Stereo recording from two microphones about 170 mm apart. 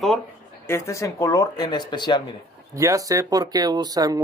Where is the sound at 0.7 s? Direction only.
15° left (ahead or behind).